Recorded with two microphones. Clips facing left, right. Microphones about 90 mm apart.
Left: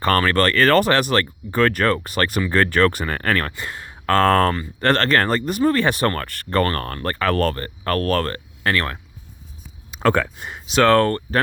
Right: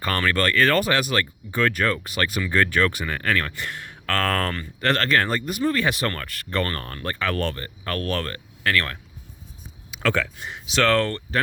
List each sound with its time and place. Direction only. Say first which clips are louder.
0.0 s speech: left 5 dB; 45° left (ahead or behind)
3.5 s speech: left 1 dB; 25° left (ahead or behind)
9.9 s a sound: left 5 dB; 40° left (ahead or behind)
10.4 s speech: left 5 dB; 45° left (ahead or behind)